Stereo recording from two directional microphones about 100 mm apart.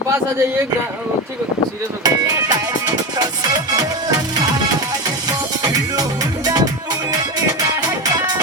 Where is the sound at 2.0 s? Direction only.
40° right (ahead or behind).